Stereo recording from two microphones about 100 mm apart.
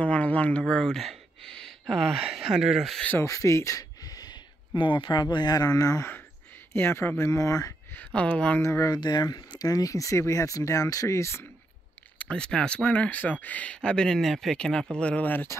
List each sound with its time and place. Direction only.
0.0 s speech: 15° left (ahead or behind); by 3.0 s 5° right (ahead or behind)
3.2 s speech: 30° left (ahead or behind)
7.9 s speech: 15° left (ahead or behind)
8.5 s speech: 30° left (ahead or behind)
8.9 s speech: 45° left (ahead or behind); by 11.4 s 30° left (ahead or behind)
12.2 s speech: 10° left (ahead or behind)